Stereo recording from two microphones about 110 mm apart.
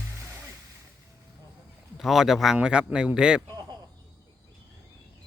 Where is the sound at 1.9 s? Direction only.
5° right (ahead or behind).